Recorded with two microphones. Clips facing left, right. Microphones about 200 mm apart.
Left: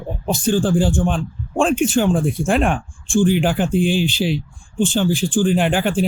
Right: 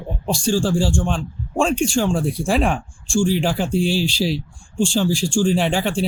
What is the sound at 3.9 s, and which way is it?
Speech, 35° right (ahead or behind).